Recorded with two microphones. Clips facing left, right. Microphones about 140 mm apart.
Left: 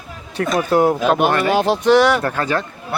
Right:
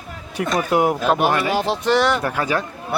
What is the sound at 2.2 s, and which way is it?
Speech, 10° right (ahead or behind).